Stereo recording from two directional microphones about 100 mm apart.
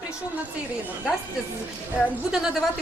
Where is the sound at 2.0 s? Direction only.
5° right (ahead or behind).